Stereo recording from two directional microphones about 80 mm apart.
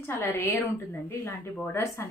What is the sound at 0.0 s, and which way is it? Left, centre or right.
A woman's voice, left.